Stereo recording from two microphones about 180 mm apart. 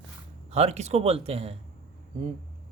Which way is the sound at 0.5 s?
35° right (ahead or behind).